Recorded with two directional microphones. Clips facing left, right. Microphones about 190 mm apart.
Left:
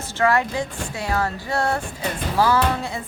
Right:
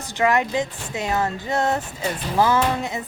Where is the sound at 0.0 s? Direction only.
15° right (ahead or behind).